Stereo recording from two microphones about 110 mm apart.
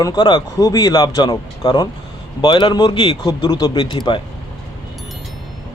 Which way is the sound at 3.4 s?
35° left (ahead or behind).